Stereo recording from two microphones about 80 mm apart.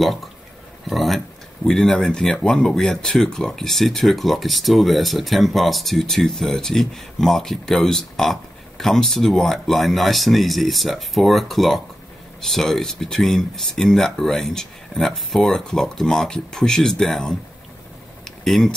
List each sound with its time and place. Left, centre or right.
0.8 s speech: centre
18.4 s speech: centre